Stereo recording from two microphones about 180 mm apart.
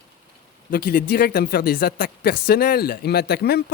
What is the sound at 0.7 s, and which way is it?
Speech, 55° left (ahead or behind).